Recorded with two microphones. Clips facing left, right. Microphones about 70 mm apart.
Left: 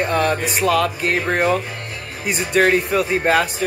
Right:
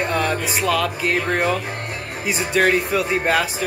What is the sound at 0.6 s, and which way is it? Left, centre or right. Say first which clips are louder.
Speech: left 3 dB; centre.